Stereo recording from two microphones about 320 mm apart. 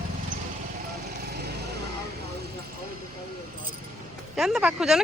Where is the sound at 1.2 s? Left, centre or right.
Right.